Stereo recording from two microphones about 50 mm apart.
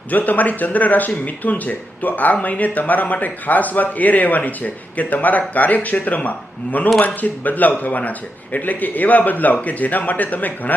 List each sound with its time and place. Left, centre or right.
0.1 s speech: left